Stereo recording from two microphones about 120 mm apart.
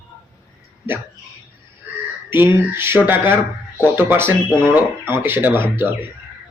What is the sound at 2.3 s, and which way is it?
A man's voice, 20° right (ahead or behind).